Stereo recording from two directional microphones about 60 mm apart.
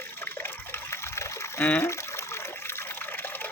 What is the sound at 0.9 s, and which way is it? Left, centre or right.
Water, left.